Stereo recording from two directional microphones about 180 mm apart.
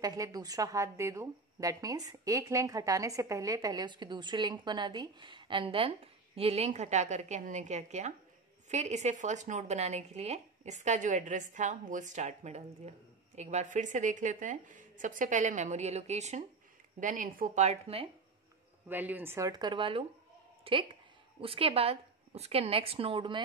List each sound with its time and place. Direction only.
0.0 s a woman's voice: 20° right (ahead or behind); by 17.6 s 50° right (ahead or behind)
17.6 s speech: 30° right (ahead or behind)
18.9 s a woman's voice: 10° right (ahead or behind); by 23.4 s 30° right (ahead or behind)